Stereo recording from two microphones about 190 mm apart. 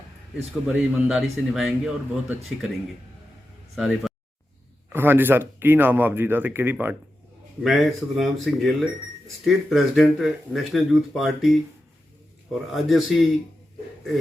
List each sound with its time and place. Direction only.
0.7 s speech: 5° right (ahead or behind)
3.8 s speech: centre (ahead or behind)
12.7 s speech: centre (ahead or behind)